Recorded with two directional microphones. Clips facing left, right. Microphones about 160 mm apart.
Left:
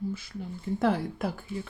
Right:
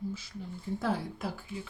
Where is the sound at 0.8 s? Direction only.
55° left (ahead or behind).